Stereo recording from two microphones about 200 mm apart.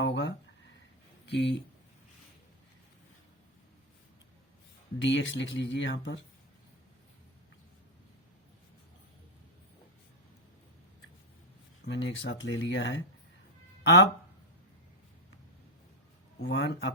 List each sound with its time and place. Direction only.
0.0 s a sound: 60° left (ahead or behind)
1.3 s speech: 60° left (ahead or behind)
5.0 s speech: 65° left (ahead or behind)
11.9 s speech: 60° left (ahead or behind)
16.4 s speech: 60° left (ahead or behind)